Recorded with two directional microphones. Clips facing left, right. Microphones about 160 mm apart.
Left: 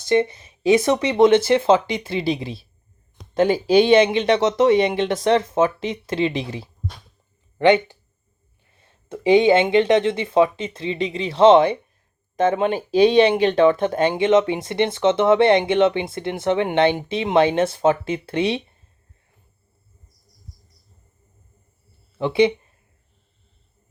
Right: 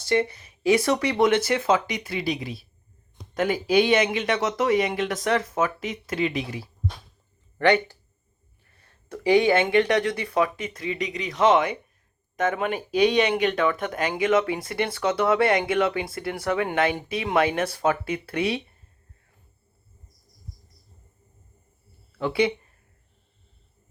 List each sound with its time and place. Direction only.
0.0 s speech: 20° left (ahead or behind)
22.2 s speech: 20° left (ahead or behind)